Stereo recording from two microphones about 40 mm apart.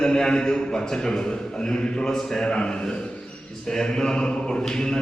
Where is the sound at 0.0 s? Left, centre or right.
Centre.